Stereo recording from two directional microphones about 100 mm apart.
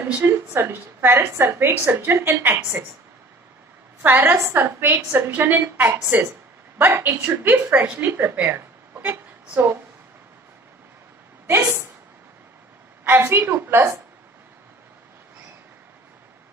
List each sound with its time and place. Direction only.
0.0 s a woman's voice: 20° right (ahead or behind)
4.0 s a woman's voice: 20° right (ahead or behind)
13.1 s a woman's voice: 20° right (ahead or behind)